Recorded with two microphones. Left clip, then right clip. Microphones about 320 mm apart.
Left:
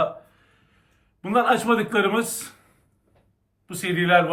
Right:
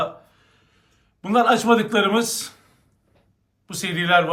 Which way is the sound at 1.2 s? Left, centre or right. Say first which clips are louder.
Right 2 dB; centre.